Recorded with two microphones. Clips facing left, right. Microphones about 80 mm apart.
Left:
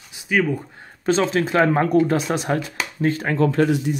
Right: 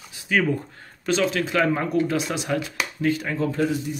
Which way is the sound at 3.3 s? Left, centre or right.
Left.